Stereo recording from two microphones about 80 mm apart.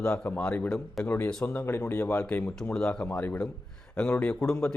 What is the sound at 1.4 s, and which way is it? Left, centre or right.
Speech, left.